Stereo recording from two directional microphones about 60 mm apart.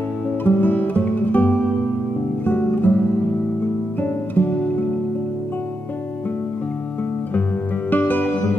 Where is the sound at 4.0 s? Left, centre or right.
Left.